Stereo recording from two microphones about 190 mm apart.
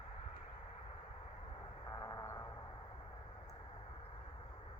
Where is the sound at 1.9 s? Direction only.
15° left (ahead or behind).